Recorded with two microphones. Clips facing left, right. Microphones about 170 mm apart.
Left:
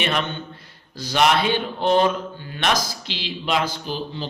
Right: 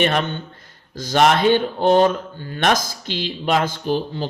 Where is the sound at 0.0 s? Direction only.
45° right (ahead or behind).